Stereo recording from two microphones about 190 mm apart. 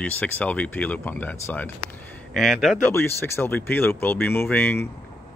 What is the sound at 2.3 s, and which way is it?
Speech, centre (ahead or behind).